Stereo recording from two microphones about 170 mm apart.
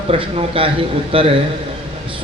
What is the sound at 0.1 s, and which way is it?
Speech, 35° right (ahead or behind).